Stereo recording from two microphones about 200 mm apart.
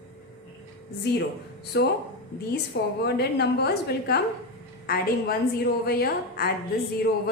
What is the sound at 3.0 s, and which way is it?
A woman's voice, 55° left (ahead or behind).